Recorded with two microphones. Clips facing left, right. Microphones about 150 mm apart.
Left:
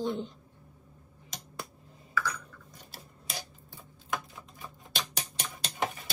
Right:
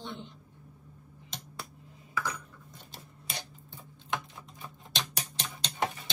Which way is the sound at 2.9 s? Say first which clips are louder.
Left 1 dB; 5° left (ahead or behind).